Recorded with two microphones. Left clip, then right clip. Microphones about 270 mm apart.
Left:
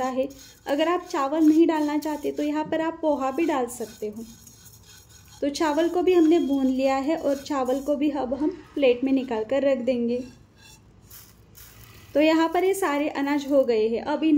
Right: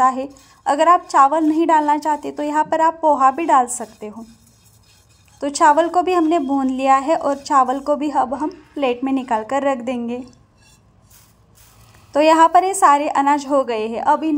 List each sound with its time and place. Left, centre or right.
0.7 s a woman's voice: centre
5.4 s a woman's voice: centre
12.1 s a woman's voice: centre